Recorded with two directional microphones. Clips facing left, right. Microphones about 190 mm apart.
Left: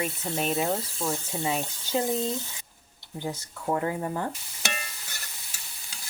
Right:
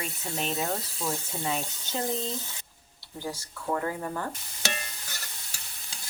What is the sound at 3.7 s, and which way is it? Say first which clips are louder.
Speech: left 2 dB; 20° left (ahead or behind).